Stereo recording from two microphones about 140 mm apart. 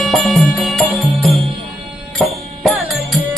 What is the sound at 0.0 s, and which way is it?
Music, centre (ahead or behind).